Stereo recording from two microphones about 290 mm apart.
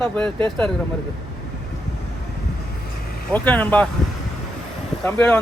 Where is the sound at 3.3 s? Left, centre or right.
Centre.